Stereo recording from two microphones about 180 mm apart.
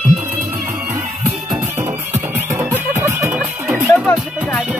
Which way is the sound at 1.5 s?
15° right (ahead or behind).